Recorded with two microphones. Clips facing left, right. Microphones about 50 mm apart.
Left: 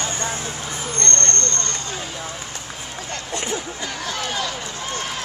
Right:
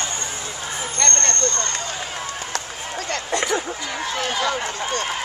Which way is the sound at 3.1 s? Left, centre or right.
Right.